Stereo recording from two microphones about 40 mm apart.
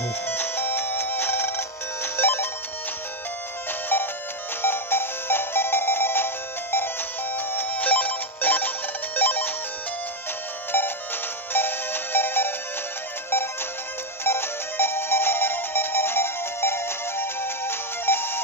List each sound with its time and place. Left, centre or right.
0.3 s music: left
3.9 s music: left
4.6 s music: left
7.3 s ringtone: left
11.5 s music: left
14.2 s music: left